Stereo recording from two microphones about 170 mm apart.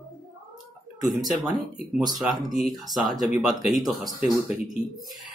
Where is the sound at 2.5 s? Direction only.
Centre (ahead or behind).